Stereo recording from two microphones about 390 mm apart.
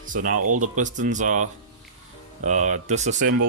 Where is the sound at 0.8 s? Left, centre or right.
Centre.